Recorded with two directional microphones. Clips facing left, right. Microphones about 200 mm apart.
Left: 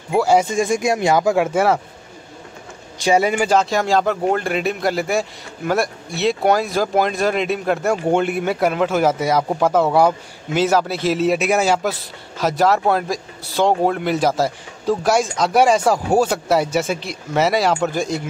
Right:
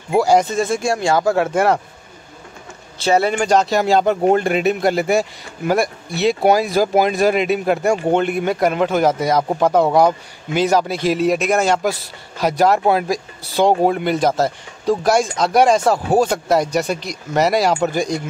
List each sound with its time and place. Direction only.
0.1 s speech: 5° left (ahead or behind)
3.0 s speech: 10° left (ahead or behind)
4.0 s speech: 20° right (ahead or behind)
4.5 s speech: centre (ahead or behind)
14.1 s speech: 10° left (ahead or behind)